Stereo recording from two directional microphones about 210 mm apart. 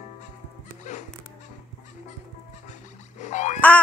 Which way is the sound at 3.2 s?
35° left (ahead or behind).